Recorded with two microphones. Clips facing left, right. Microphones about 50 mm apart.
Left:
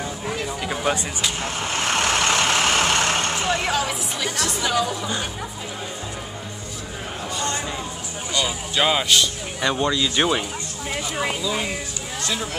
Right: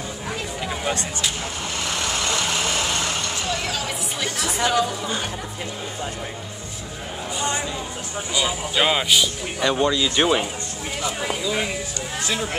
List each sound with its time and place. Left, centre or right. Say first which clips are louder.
1.4 s vehicle: left 3 dB; left
3.3 s vehicle: left 3 dB; left
3.7 s music: left 3 dB; centre
4.6 s speech: right 2 dB; centre
7.3 s a sound: right 2 dB; centre
8.3 s speech: even; centre
11.4 s speech: right 1 dB; centre